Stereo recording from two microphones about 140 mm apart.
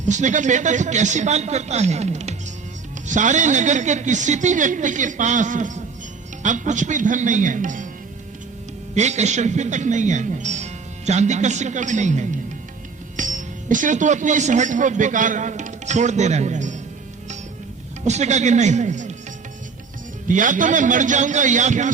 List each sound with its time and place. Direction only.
0.0 s speech: 60° right (ahead or behind)
9.0 s speech: 55° right (ahead or behind)
18.0 s speech: 55° right (ahead or behind)
20.2 s speech: 70° right (ahead or behind)